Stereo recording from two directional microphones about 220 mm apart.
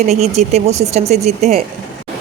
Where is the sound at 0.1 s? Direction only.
30° right (ahead or behind).